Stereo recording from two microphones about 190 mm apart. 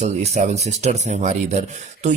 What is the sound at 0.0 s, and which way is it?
Speech, 35° right (ahead or behind).